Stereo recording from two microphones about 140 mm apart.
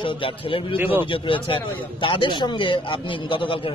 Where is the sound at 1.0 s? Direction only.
35° left (ahead or behind).